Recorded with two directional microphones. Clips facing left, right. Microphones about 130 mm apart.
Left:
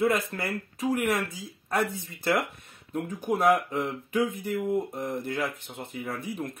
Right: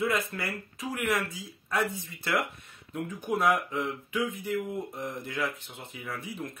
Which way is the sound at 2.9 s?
40° left (ahead or behind).